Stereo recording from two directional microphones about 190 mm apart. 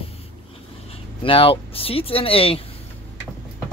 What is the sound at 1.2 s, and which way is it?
Speech, 30° left (ahead or behind).